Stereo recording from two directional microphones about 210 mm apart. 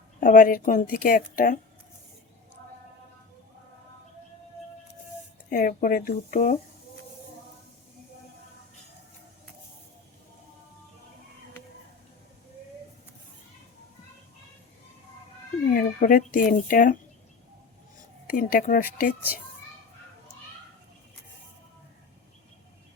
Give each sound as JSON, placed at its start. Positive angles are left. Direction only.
{"t": 0.2, "sound": "speech", "side_deg": 40}
{"t": 5.5, "sound": "speech", "side_deg": 40}
{"t": 15.7, "sound": "speech", "side_deg": 40}
{"t": 18.3, "sound": "speech", "side_deg": 40}